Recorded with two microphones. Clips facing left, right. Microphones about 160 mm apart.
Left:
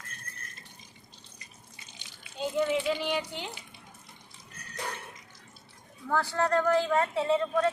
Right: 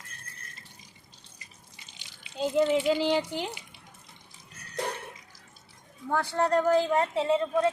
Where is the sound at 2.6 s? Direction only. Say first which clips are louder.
Right 4 dB; 30° right (ahead or behind).